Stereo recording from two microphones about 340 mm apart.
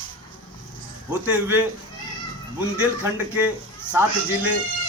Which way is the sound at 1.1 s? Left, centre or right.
Centre.